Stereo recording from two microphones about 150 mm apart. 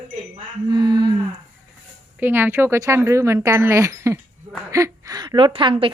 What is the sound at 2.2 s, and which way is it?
A woman's voice, 15° right (ahead or behind).